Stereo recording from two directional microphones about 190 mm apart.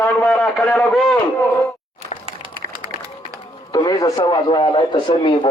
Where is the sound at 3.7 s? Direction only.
20° left (ahead or behind).